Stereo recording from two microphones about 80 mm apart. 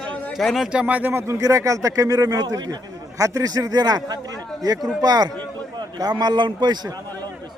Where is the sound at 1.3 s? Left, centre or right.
Right.